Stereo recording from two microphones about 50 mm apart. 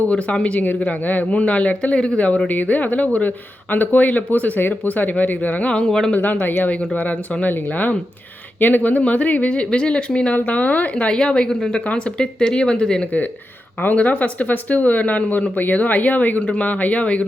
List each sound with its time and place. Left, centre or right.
0.1 s a woman's voice: left
0.6 s a woman's voice: left
5.7 s speech: centre
6.1 s a woman's voice: left; by 13.0 s centre
13.8 s speech: left